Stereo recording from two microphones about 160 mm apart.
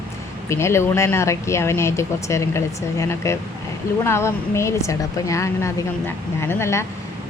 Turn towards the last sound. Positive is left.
turn(degrees=15)  # may be behind; listen again after turning